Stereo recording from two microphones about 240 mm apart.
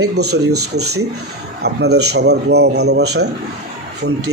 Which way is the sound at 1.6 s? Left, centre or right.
Right.